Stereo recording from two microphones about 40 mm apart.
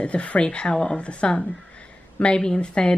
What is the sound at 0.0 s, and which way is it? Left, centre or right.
Speech, left.